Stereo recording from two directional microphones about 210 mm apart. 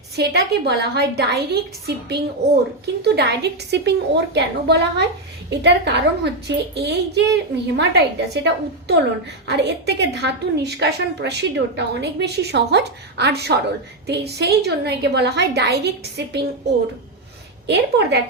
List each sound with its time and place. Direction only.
0.2 s a woman's voice: 50° right (ahead or behind)
17.7 s a woman's voice: 55° right (ahead or behind)